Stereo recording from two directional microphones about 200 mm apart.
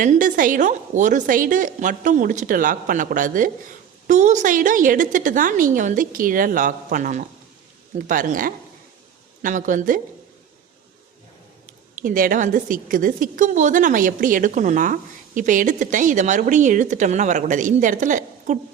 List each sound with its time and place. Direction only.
0.0 s a woman's voice: 40° right (ahead or behind)
12.0 s a woman's voice: 45° right (ahead or behind)